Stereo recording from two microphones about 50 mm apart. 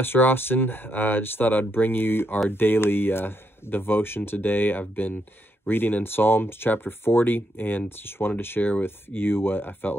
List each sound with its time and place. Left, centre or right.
0.0 s speech: left